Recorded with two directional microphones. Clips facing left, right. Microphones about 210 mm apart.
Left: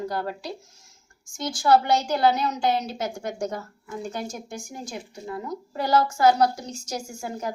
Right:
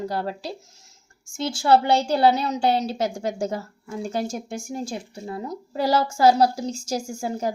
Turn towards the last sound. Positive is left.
turn(degrees=-30)  # may be behind; listen again after turning